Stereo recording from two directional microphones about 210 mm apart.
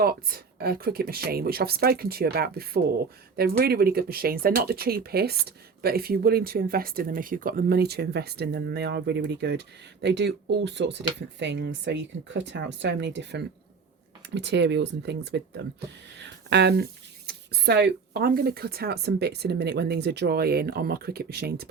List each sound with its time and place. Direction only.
0.0 s speech: 45° right (ahead or behind)